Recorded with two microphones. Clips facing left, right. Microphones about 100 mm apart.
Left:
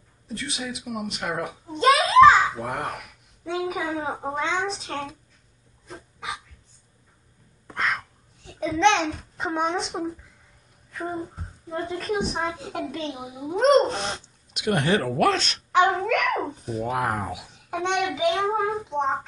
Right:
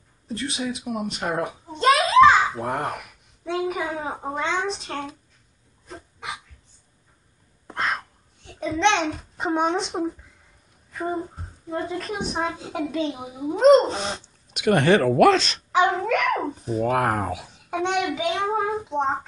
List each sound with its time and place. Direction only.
0.3 s a woman's voice: centre (ahead or behind)
1.3 s a sound: centre (ahead or behind)
2.8 s a woman's voice: centre (ahead or behind)
5.9 s dog: centre (ahead or behind)
7.6 s a sound: 30° right (ahead or behind)
8.4 s a child's voice: centre (ahead or behind)
16.8 s speech: 55° right (ahead or behind)
17.4 s a woman's voice: centre (ahead or behind)